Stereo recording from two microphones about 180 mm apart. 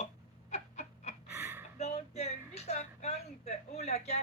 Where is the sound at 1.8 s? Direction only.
40° left (ahead or behind).